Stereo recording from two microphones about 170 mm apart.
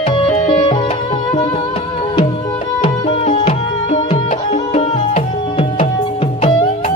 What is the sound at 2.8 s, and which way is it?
Music, 35° left (ahead or behind).